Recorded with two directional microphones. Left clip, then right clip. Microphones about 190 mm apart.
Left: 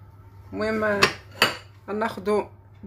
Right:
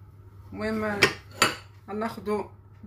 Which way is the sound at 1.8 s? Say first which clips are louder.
Left 6 dB; 55° left (ahead or behind).